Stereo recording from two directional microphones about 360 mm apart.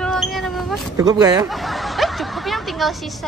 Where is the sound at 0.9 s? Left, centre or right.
Centre.